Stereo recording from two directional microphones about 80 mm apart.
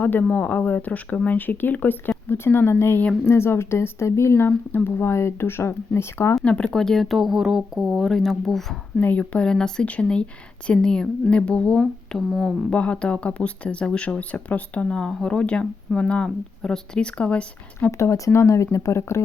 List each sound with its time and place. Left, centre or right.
0.0 s speech: left
6.4 s speech: centre
9.0 s speech: centre
12.7 s speech: centre
17.9 s speech: left